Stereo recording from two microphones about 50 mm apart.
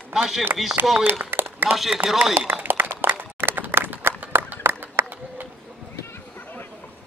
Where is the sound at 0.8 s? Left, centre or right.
Right.